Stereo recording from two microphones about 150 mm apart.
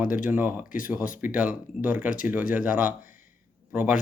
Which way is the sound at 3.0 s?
65° left (ahead or behind).